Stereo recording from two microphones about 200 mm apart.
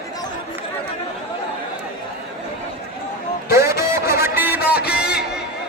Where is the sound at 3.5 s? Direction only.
15° right (ahead or behind).